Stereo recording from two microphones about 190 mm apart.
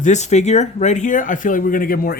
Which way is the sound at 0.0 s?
35° left (ahead or behind).